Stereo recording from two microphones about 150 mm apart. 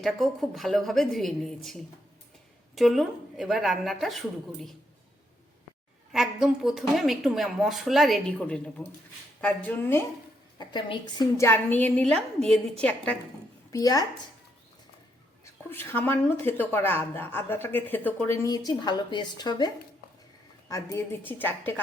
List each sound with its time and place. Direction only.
0.0 s a woman's voice: centre (ahead or behind)
6.1 s a woman's voice: centre (ahead or behind); by 10.1 s 15° left (ahead or behind)
10.6 s a woman's voice: 30° left (ahead or behind); by 13.1 s 10° left (ahead or behind)
13.7 s a woman's voice: 25° left (ahead or behind)
15.7 s a woman's voice: 15° left (ahead or behind)
18.4 s a woman's voice: 25° left (ahead or behind)